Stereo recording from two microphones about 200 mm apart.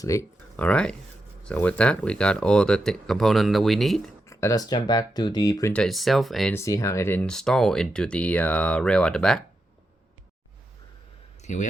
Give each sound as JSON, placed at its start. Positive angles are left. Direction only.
{"t": 0.0, "sound": "speech", "side_deg": 15}
{"t": 4.3, "sound": "speech", "side_deg": 15}
{"t": 5.7, "sound": "speech", "side_deg": 0}
{"t": 6.5, "sound": "speech", "side_deg": 15}
{"t": 11.4, "sound": "speech", "side_deg": 35}